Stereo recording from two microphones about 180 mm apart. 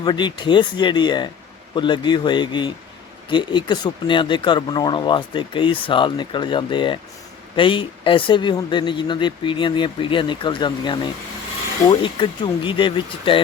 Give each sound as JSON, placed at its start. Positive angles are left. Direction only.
{"t": 0.0, "sound": "speech", "side_deg": 25}